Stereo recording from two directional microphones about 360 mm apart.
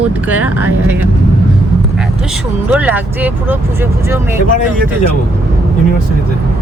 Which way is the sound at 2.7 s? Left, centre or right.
Centre.